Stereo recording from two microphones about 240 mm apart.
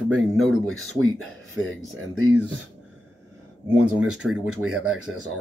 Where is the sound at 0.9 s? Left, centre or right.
Right.